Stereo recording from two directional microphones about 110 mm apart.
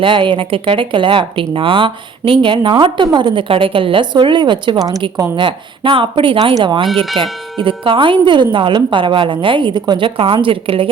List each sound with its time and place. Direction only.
0.0 s speech: 50° right (ahead or behind)
10.2 s a woman's voice: 55° right (ahead or behind)